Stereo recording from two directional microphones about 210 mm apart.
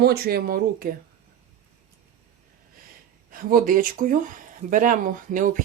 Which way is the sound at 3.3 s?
40° right (ahead or behind).